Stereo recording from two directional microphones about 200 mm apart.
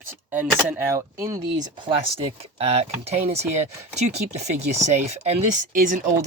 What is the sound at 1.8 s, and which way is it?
Speech, 25° right (ahead or behind).